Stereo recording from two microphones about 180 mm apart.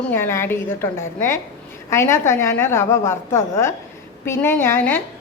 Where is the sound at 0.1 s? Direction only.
15° left (ahead or behind).